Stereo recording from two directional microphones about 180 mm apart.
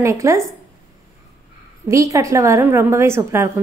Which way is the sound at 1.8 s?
15° right (ahead or behind).